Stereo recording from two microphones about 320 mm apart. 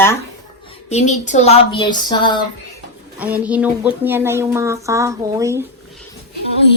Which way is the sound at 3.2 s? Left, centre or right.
Centre.